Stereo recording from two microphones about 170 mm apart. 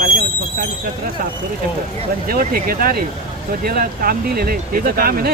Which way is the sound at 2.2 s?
60° right (ahead or behind).